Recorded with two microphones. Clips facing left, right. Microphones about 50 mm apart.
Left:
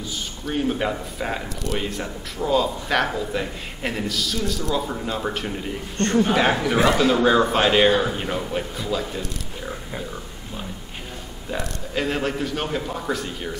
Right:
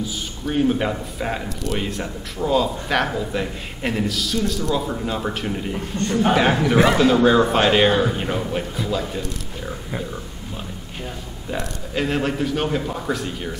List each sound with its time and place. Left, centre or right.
0.0 s speech: centre
11.5 s speech: centre